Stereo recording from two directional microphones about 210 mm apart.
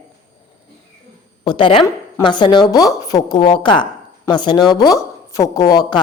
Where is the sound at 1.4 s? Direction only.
25° left (ahead or behind).